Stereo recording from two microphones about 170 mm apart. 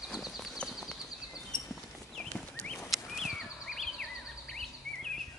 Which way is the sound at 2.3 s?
5° left (ahead or behind).